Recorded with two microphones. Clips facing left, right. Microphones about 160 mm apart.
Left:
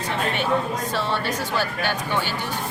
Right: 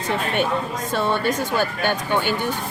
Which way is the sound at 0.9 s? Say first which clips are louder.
Right 4 dB; 50° right (ahead or behind).